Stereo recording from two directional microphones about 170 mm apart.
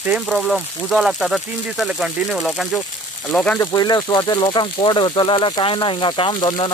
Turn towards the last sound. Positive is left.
turn(degrees=30)  # may be behind; listen again after turning